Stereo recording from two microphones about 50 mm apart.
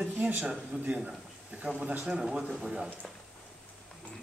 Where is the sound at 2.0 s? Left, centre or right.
Centre.